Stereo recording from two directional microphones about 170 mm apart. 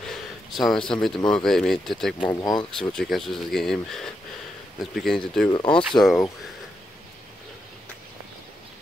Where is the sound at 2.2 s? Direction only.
25° left (ahead or behind).